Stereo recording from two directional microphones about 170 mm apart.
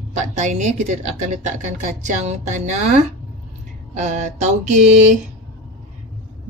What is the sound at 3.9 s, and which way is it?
Speech, 45° right (ahead or behind).